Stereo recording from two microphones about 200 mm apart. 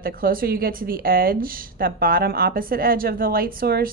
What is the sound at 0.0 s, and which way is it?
Speech, 45° right (ahead or behind).